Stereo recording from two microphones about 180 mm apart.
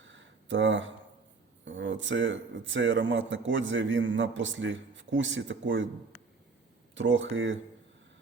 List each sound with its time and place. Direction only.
0.0 s a sound: 90° right
1.6 s speech: 90° right
6.9 s speech: 90° right